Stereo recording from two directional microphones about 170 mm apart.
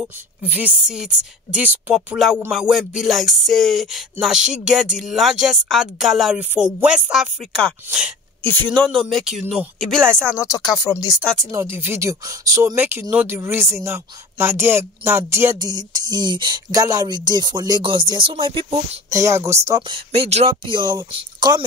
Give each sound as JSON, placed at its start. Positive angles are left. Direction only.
{"t": 0.0, "sound": "speech", "side_deg": -10}
{"t": 8.5, "sound": "speech", "side_deg": 10}
{"t": 9.8, "sound": "speech", "side_deg": 5}
{"t": 10.4, "sound": "speech", "side_deg": 20}
{"t": 11.5, "sound": "speech", "side_deg": -15}
{"t": 19.1, "sound": "speech", "side_deg": -15}
{"t": 19.9, "sound": "speech", "side_deg": -35}